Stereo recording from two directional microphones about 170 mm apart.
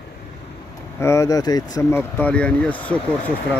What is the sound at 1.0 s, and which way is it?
Speech, 15° left (ahead or behind).